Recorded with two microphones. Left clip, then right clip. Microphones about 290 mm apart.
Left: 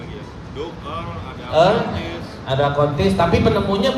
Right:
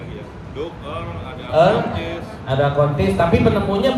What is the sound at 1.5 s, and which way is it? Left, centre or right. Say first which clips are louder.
A man's voice: even; left.